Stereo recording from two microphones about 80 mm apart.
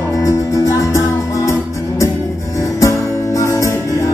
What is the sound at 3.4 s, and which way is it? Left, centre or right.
Music, left.